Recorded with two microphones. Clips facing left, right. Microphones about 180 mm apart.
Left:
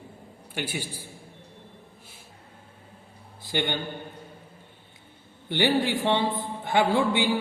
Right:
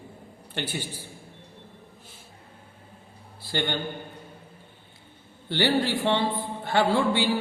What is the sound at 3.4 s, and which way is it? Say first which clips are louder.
Speech: left 1 dB; 15° left (ahead or behind).